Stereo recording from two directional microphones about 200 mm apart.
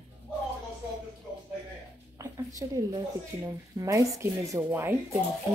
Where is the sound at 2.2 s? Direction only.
20° right (ahead or behind).